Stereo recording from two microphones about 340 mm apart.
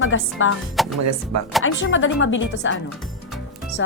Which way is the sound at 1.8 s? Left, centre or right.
Left.